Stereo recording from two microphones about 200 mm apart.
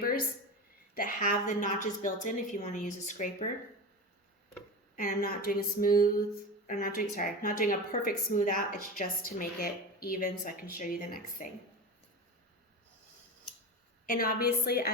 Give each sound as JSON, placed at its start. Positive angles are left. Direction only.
{"t": 0.0, "sound": "a sound", "side_deg": 45}
{"t": 0.9, "sound": "a woman's voice", "side_deg": 40}
{"t": 4.9, "sound": "a woman's voice", "side_deg": 45}
{"t": 14.1, "sound": "a woman's voice", "side_deg": 45}